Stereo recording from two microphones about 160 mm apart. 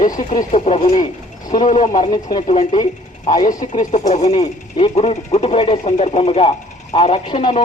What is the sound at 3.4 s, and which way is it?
Speech, 50° left (ahead or behind).